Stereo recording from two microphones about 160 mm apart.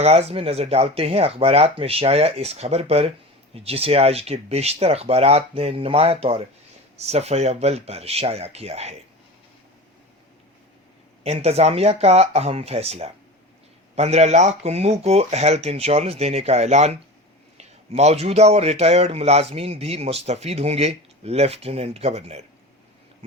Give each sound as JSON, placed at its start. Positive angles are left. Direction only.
{"t": 0.0, "sound": "speech", "side_deg": -40}
{"t": 11.2, "sound": "speech", "side_deg": -40}